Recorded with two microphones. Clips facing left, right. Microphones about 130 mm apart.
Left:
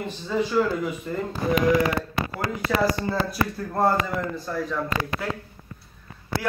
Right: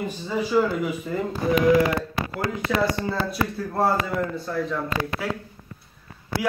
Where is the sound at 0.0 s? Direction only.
10° right (ahead or behind).